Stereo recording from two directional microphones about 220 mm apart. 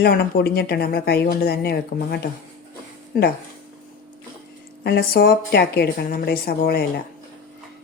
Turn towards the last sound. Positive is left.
turn(degrees=45)  # may be behind; listen again after turning